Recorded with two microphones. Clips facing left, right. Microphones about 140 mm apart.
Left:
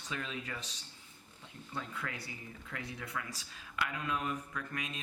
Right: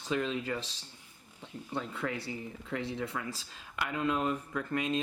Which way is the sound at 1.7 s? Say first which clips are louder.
Right 6 dB; 30° right (ahead or behind).